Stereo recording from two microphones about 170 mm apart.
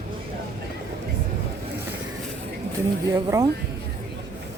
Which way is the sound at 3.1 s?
20° right (ahead or behind).